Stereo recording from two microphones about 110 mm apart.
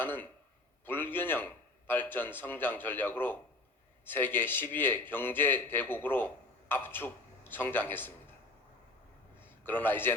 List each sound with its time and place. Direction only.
0.0 s a man's voice: 20° left (ahead or behind)
9.4 s a man's voice: 20° left (ahead or behind)